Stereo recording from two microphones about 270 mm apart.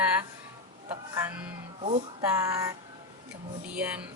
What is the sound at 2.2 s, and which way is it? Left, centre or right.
Speech, centre.